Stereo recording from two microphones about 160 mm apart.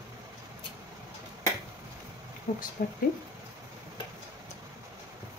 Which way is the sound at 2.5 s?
55° left (ahead or behind).